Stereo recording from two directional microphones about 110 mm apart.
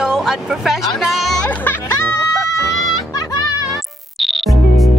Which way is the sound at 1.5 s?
15° left (ahead or behind).